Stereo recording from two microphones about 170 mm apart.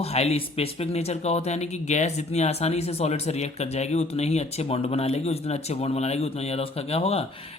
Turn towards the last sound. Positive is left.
turn(degrees=35)  # may be behind; listen again after turning